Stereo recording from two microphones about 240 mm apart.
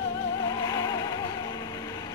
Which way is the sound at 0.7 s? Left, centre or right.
Centre.